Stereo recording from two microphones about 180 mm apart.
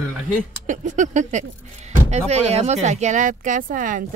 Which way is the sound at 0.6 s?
45° right (ahead or behind).